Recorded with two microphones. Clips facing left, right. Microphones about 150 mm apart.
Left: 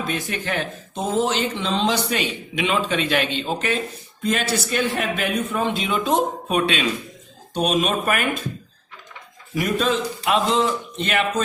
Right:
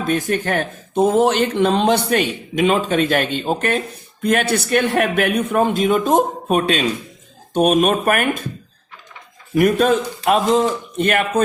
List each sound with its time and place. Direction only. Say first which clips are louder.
0.1 s a man's voice: right 7 dB; 50° right (ahead or behind)
7.5 s speech: right 6 dB; 50° right (ahead or behind)
9.6 s speech: right 7 dB; 55° right (ahead or behind)